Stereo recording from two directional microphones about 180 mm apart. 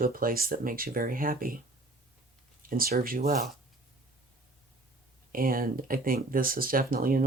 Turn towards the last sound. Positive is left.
turn(degrees=-50)  # may be behind; listen again after turning